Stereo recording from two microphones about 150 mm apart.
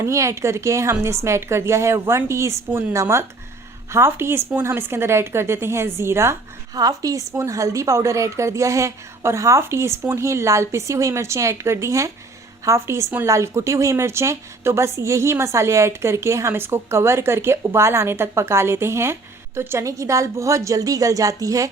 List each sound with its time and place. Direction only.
0.0 s a woman's voice: 20° right (ahead or behind)